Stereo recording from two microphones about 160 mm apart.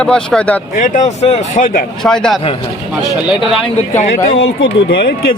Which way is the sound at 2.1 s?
5° left (ahead or behind).